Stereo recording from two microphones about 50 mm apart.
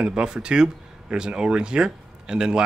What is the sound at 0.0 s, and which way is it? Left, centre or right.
Speech, centre.